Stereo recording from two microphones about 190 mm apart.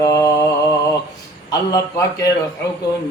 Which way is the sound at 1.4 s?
15° left (ahead or behind).